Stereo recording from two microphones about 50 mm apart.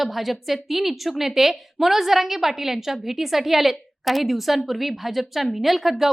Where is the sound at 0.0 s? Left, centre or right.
Centre.